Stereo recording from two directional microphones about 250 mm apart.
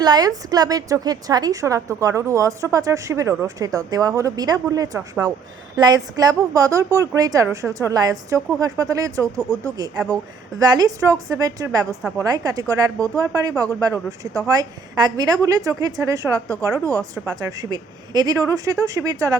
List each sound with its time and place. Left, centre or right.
0.0 s a woman's voice: centre